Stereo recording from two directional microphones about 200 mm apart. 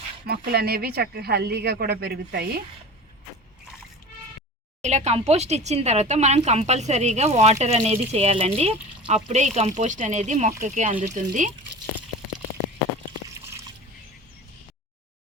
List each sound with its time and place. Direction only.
0.3 s speech: 50° right (ahead or behind)
4.8 s speech: 35° right (ahead or behind)
13.2 s liquid: 15° right (ahead or behind)